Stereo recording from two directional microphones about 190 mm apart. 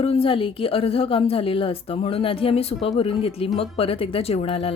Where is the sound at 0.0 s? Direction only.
30° left (ahead or behind).